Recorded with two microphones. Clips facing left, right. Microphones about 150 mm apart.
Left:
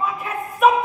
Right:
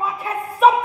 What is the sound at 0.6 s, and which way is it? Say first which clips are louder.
Speech: right 1 dB; 30° right (ahead or behind).